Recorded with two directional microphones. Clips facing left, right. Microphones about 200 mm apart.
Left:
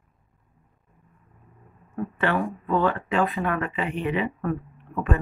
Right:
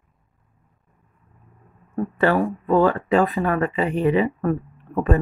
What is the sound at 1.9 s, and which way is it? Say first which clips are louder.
A woman's voice: right 6 dB; 35° right (ahead or behind).